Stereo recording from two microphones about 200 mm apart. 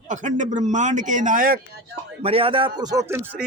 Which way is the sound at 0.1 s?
40° right (ahead or behind).